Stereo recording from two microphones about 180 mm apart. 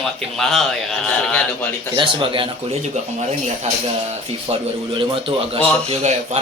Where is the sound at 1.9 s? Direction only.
25° right (ahead or behind).